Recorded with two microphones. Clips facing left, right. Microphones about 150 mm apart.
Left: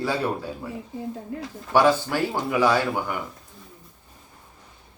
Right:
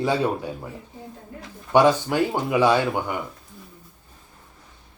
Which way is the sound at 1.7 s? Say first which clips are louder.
Right 2 dB; 20° right (ahead or behind).